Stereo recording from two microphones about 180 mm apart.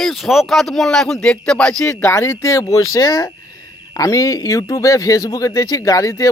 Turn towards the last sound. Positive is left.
turn(degrees=20)  # may be behind; listen again after turning